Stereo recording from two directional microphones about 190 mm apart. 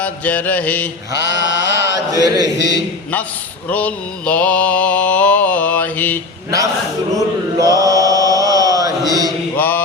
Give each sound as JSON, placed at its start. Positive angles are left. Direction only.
{"t": 0.0, "sound": "mantra", "side_deg": 10}
{"t": 1.1, "sound": "mantra", "side_deg": 65}
{"t": 2.1, "sound": "chant", "side_deg": -20}
{"t": 2.6, "sound": "a man's voice", "side_deg": 60}
{"t": 3.7, "sound": "mantra", "side_deg": 5}
{"t": 7.6, "sound": "chant", "side_deg": -20}
{"t": 9.6, "sound": "mantra", "side_deg": 10}